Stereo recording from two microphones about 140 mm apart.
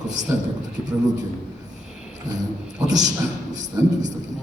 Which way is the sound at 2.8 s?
25° right (ahead or behind).